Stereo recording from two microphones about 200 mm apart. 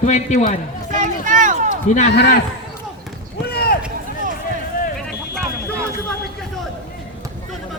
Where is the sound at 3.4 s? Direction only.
50° left (ahead or behind).